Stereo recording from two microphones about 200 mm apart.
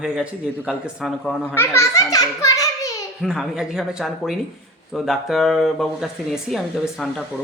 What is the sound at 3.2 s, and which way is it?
Speech, centre (ahead or behind).